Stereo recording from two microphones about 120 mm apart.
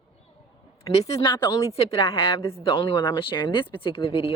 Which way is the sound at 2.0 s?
50° left (ahead or behind).